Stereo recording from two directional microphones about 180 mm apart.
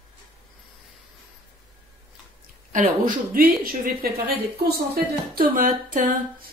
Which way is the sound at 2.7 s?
50° right (ahead or behind).